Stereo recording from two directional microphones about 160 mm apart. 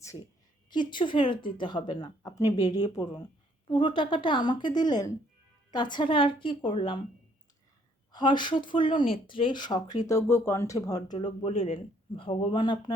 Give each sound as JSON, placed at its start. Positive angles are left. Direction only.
{"t": 0.7, "sound": "speech", "side_deg": 30}
{"t": 8.1, "sound": "speech", "side_deg": 30}
{"t": 11.4, "sound": "speech", "side_deg": 35}